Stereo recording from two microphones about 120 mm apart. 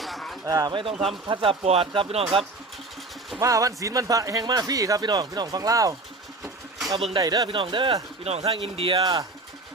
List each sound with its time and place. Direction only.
0.0 s a sound: centre (ahead or behind)
0.4 s speech: 30° right (ahead or behind)
0.9 s speech: centre (ahead or behind)
1.3 s speech: 50° right (ahead or behind)
3.4 s speech: 30° right (ahead or behind)
7.2 s speech: 30° right (ahead or behind)
7.4 s speech: 45° right (ahead or behind)
8.2 s speech: 60° right (ahead or behind)